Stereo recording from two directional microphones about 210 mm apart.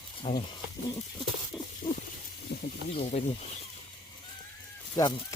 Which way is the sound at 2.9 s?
25° left (ahead or behind).